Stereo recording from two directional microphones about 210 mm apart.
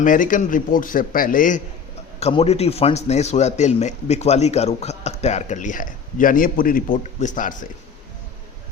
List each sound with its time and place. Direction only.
0.0 s speech: 40° left (ahead or behind)